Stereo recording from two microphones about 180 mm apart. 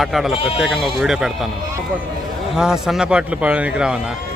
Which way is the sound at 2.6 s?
5° right (ahead or behind).